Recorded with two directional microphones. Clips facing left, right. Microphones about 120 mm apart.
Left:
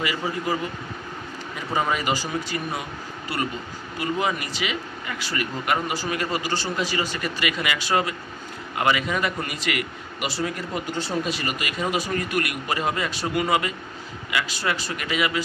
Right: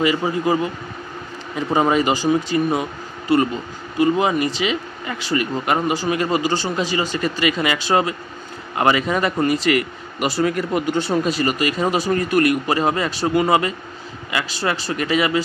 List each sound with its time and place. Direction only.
0.2 s speech: 20° right (ahead or behind)
1.8 s speech: 30° right (ahead or behind); by 11.1 s 60° right (ahead or behind)
11.2 s speech: 40° right (ahead or behind)